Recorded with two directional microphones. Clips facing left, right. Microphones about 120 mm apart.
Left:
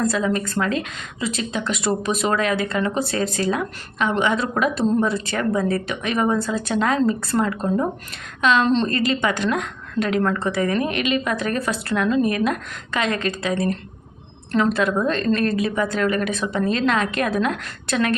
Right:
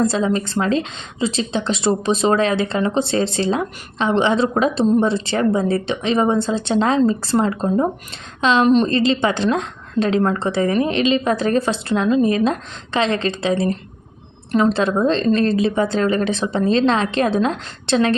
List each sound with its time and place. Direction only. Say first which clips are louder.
0.0 s a woman's voice: right 3 dB; 30° right (ahead or behind)
8.6 s a woman's voice: right 5 dB; 15° right (ahead or behind)
8.9 s speech: right 4 dB; 25° right (ahead or behind)